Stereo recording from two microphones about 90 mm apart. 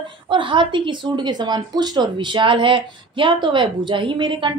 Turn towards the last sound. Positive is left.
turn(degrees=-65)  # may be behind; listen again after turning